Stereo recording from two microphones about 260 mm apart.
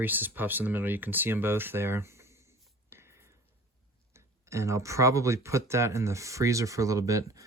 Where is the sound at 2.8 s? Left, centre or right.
Centre.